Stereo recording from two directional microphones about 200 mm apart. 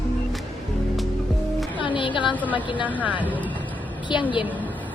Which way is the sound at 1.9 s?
25° left (ahead or behind).